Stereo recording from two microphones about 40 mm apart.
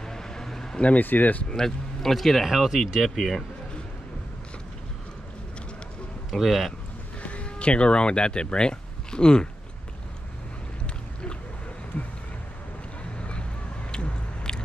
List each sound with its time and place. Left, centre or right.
0.0 s a sound: centre
0.9 s speech: left
1.5 s speech: centre
2.5 s speech: centre
6.3 s speech: centre
7.2 s speech: left
13.2 s vehicle: left
13.9 s biting: left